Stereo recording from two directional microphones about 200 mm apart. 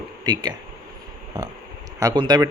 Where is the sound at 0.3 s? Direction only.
20° right (ahead or behind).